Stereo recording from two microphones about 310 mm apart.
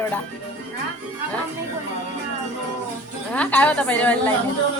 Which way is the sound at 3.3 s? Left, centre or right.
Centre.